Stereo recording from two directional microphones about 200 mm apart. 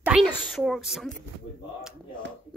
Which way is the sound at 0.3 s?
5° left (ahead or behind).